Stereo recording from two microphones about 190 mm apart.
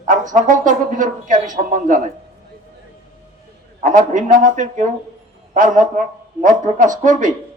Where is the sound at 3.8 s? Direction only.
45° right (ahead or behind).